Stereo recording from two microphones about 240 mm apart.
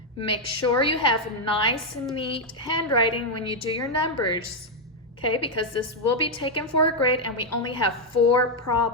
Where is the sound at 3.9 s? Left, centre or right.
Left.